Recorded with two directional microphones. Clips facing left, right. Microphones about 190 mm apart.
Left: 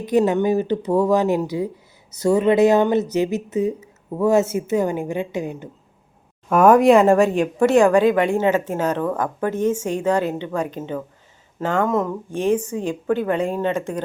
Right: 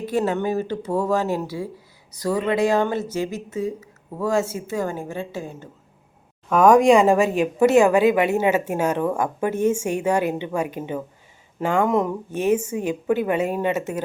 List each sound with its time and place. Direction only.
0.0 s speech: 15° left (ahead or behind)
6.5 s speech: 5° left (ahead or behind)